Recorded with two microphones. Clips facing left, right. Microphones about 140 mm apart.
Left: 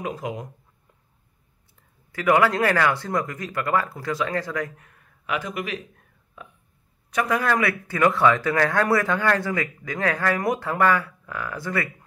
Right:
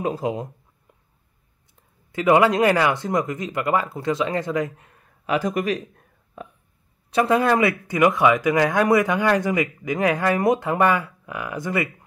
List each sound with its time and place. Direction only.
0.0 s speech: 30° right (ahead or behind)
2.1 s speech: 20° right (ahead or behind); by 5.9 s 40° right (ahead or behind)
7.1 s speech: 25° right (ahead or behind)